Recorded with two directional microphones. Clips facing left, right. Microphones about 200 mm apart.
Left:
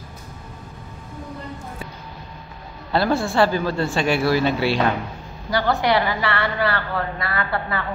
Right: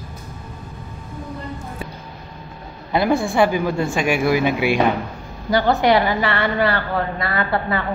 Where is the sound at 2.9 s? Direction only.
15° right (ahead or behind).